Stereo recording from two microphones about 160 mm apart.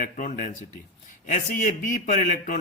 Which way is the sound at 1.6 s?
50° left (ahead or behind).